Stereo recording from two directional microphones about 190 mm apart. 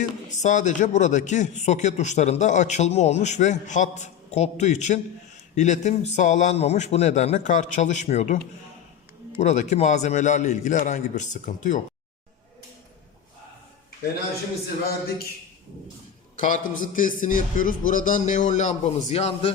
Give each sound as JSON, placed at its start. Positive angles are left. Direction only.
{"t": 0.3, "sound": "a man's voice", "side_deg": 40}
{"t": 9.4, "sound": "a man's voice", "side_deg": 40}
{"t": 16.4, "sound": "a man's voice", "side_deg": 45}